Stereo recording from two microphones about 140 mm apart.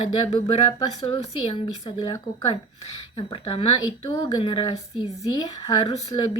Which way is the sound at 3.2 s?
40° left (ahead or behind).